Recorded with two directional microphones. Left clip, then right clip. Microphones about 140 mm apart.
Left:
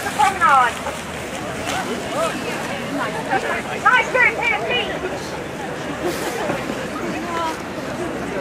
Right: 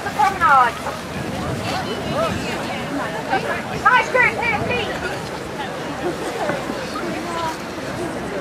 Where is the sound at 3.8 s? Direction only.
20° right (ahead or behind).